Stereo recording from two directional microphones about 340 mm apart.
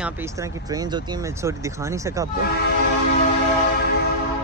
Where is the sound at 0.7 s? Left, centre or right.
Centre.